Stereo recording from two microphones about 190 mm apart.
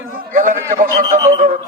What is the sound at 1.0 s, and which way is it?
Speech, 20° right (ahead or behind).